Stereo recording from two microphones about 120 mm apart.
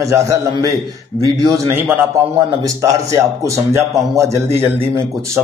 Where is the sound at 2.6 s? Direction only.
30° right (ahead or behind).